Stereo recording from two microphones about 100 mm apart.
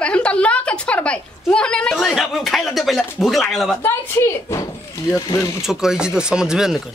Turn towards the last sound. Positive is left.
turn(degrees=-5)  # may be behind; listen again after turning